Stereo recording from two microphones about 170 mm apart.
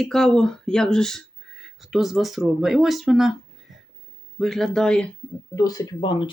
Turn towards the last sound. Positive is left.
turn(degrees=30)  # may be behind; listen again after turning